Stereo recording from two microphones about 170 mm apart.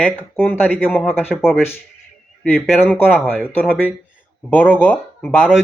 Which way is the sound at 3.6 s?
5° right (ahead or behind).